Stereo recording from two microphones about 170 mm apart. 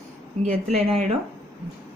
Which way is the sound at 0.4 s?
35° right (ahead or behind).